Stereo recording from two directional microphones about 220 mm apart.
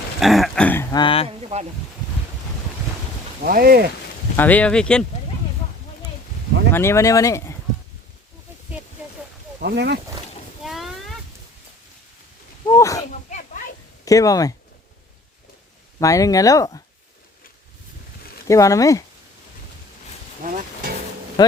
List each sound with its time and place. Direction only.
0.2 s speech: centre (ahead or behind); by 1.3 s 25° left (ahead or behind)
1.4 s speech: 30° right (ahead or behind)
3.4 s speech: 45° right (ahead or behind)
4.4 s speech: 5° left (ahead or behind)
6.7 s speech: 10° left (ahead or behind)
9.6 s speech: 45° right (ahead or behind)
10.6 s a sound: centre (ahead or behind)
12.6 s speech: 15° left (ahead or behind)
13.3 s a sound: 35° left (ahead or behind)
14.0 s speech: 15° left (ahead or behind)
16.0 s speech: 15° left (ahead or behind)
18.4 s speech: 15° left (ahead or behind)
20.4 s speech: 40° right (ahead or behind)
21.4 s speech: 20° left (ahead or behind)